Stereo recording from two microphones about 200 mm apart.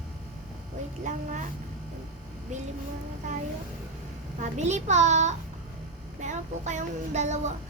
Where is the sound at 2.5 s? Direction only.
35° right (ahead or behind).